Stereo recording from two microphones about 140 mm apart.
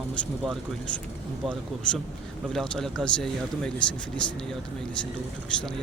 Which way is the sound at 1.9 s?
5° left (ahead or behind).